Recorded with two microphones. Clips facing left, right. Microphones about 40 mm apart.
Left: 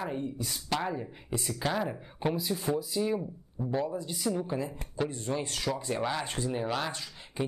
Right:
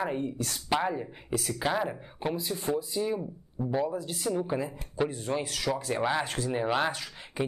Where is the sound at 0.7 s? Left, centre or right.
Centre.